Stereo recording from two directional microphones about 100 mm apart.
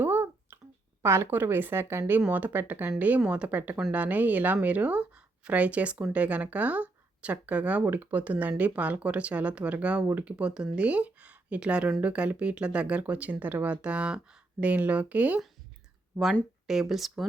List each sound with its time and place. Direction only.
0.0 s a sound: 20° right (ahead or behind)
1.0 s a woman's voice: 25° right (ahead or behind)
16.9 s speech: centre (ahead or behind)